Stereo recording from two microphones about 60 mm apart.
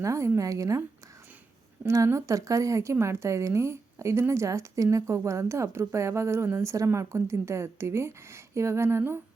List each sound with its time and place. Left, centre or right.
0.0 s a woman's voice: right
1.8 s a woman's voice: right
2.1 s a woman's voice: right